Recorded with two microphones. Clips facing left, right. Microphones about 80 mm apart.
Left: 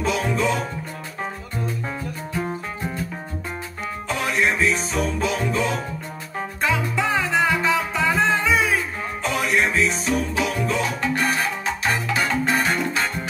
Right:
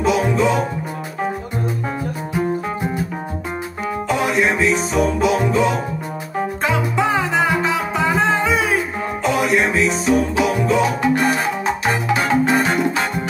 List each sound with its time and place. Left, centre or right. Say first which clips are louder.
0.0 s music: right 6 dB; centre
3.8 s music: right 7 dB; centre